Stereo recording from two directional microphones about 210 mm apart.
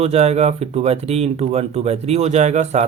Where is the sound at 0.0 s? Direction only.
30° right (ahead or behind).